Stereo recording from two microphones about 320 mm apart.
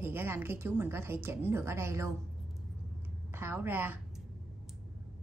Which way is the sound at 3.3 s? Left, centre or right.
Centre.